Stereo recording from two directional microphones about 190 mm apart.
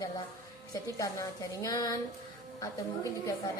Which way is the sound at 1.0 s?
20° left (ahead or behind).